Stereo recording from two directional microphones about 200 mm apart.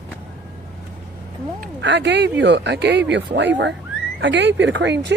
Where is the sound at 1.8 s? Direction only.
60° right (ahead or behind).